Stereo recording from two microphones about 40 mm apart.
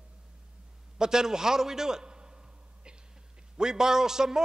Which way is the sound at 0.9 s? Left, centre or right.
Centre.